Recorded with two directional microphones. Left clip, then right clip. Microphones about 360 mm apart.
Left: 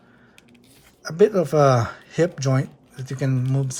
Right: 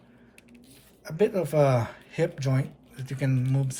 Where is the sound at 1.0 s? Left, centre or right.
Centre.